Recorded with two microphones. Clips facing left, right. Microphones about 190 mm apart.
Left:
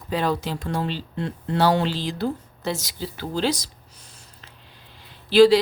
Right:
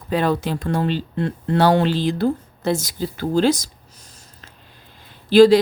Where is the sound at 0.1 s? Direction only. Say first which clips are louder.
Right 4 dB; 55° right (ahead or behind).